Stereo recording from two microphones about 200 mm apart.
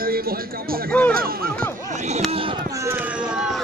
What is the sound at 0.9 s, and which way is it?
Speech, 5° left (ahead or behind).